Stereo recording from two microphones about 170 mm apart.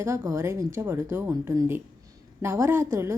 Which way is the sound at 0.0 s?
15° right (ahead or behind).